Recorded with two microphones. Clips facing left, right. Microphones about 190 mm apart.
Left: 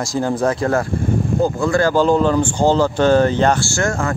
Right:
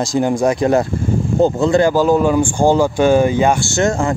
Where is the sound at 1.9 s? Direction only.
10° right (ahead or behind).